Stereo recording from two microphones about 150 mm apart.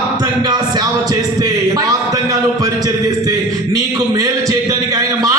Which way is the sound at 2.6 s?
25° right (ahead or behind).